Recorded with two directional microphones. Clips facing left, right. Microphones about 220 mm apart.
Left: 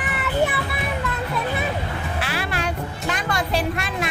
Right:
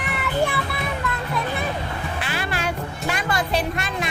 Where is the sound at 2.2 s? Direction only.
Centre (ahead or behind).